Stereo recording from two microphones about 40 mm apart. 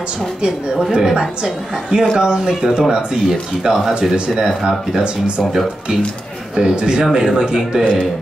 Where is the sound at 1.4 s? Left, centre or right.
Centre.